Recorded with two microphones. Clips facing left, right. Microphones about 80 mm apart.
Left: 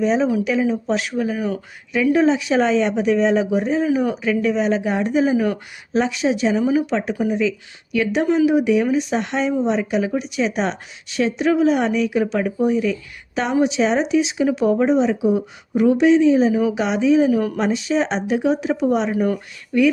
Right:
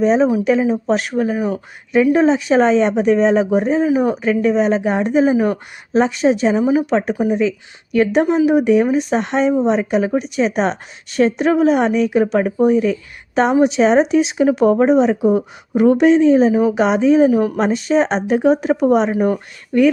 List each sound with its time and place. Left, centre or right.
0.0 s speech: right
6.9 s speech: right